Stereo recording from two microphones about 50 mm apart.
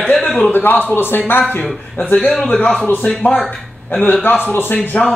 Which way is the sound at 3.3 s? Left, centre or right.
Centre.